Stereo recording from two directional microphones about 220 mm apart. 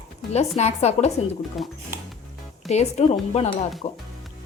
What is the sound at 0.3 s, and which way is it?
Speech, 30° left (ahead or behind).